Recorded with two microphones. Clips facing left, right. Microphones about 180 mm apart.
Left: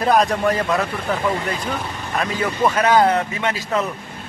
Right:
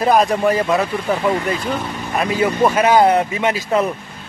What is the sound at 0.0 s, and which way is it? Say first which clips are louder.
Speech: right 2 dB; 5° right (ahead or behind).